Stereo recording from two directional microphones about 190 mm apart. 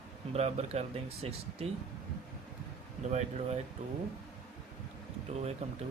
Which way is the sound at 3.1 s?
35° right (ahead or behind).